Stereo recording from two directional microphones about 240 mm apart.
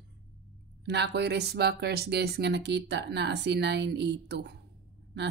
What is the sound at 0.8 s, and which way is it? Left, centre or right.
Speech, right.